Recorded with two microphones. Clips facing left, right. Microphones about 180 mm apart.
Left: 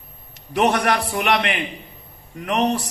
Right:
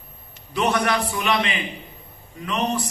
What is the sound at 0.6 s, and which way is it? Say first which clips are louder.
A man's voice: left 3 dB; 65° left (ahead or behind).